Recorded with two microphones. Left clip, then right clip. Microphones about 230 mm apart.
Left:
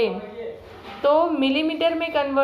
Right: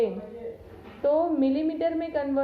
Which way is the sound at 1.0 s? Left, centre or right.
Centre.